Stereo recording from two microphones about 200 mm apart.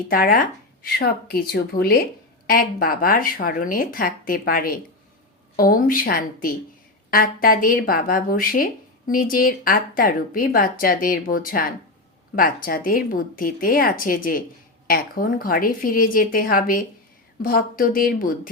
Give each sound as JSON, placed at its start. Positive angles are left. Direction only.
{"t": 0.1, "sound": "speech", "side_deg": 45}